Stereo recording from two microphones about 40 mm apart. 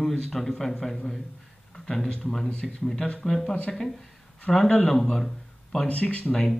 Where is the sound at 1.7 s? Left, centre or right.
Centre.